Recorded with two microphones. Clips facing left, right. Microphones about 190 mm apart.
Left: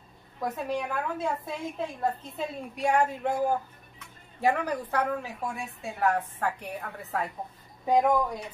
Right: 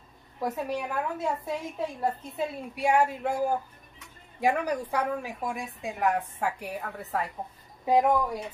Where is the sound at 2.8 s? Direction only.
5° right (ahead or behind).